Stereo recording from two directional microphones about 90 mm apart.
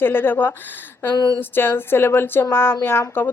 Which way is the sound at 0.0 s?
25° left (ahead or behind).